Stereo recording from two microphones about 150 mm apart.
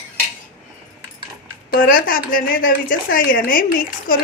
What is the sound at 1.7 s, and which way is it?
A woman's voice, 70° left (ahead or behind).